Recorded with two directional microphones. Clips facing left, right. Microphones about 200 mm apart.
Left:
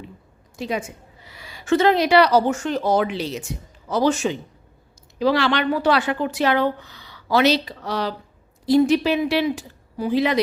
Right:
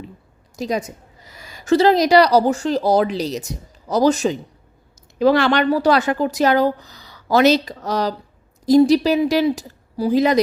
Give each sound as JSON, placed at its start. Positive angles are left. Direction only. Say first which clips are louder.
{"t": 0.5, "sound": "a woman's voice", "louder": "right 3 dB", "side_deg": -40}
{"t": 5.2, "sound": "a woman's voice", "louder": "right 4 dB", "side_deg": -50}